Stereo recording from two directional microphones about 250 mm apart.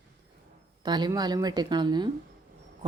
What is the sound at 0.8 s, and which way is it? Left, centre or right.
Speech, centre.